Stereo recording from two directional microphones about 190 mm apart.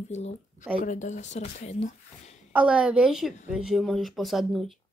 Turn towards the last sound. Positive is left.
turn(degrees=0)  # may be behind; listen again after turning